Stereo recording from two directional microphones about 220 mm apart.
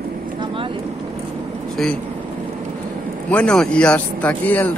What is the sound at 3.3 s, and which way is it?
Speech, 5° left (ahead or behind).